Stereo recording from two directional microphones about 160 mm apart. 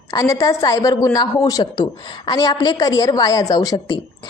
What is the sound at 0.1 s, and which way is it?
A woman's voice, 20° left (ahead or behind).